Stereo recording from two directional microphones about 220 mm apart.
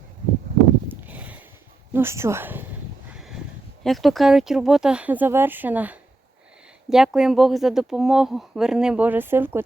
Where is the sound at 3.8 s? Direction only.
Centre (ahead or behind).